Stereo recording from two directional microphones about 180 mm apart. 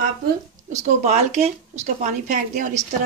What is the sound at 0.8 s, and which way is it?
Speech, 40° right (ahead or behind).